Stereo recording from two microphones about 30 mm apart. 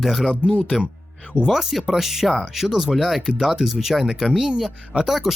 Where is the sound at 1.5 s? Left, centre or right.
Centre.